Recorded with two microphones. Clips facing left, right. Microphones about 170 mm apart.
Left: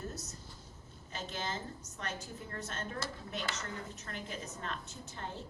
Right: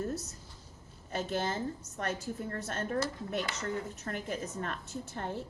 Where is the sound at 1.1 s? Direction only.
55° right (ahead or behind).